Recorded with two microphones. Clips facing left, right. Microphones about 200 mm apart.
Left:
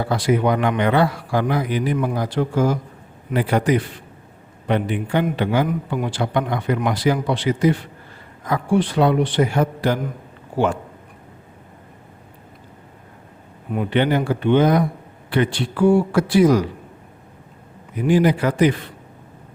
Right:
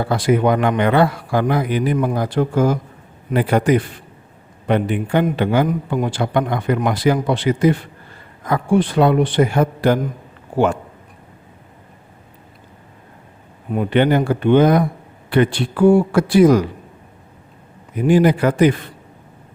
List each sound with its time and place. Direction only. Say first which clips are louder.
0.1 s a man's voice: right 3 dB; 55° right (ahead or behind)
13.7 s a man's voice: right 3 dB; 50° right (ahead or behind)
17.9 s a man's voice: right 3 dB; 50° right (ahead or behind)